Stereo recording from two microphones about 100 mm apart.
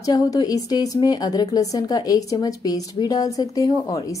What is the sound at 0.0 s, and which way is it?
A woman's voice, 35° left (ahead or behind).